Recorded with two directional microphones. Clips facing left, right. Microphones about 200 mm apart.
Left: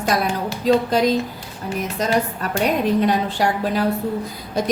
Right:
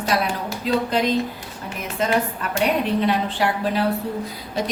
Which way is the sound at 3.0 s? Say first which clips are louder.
Left 2 dB; 45° left (ahead or behind).